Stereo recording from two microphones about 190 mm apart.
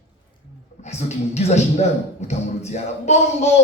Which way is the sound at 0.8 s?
35° left (ahead or behind).